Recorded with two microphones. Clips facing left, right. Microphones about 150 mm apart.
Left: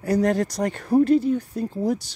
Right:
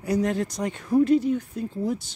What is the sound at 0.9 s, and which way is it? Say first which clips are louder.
Speech: left 2 dB; 35° left (ahead or behind).